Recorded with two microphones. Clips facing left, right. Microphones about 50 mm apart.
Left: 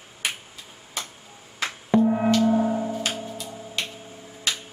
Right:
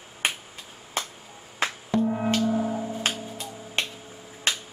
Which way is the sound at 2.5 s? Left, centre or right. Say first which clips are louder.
Left 4 dB; centre.